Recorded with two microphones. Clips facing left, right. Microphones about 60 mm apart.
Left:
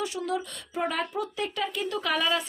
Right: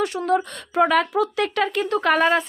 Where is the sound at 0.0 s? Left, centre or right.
Right.